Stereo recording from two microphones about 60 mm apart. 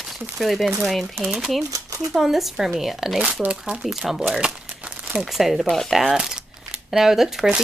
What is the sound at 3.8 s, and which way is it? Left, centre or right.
Speech, centre.